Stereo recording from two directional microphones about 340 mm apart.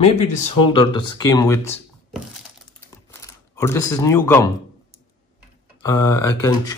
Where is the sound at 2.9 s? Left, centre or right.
Centre.